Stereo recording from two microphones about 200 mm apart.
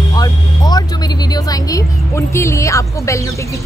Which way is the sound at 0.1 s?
20° left (ahead or behind).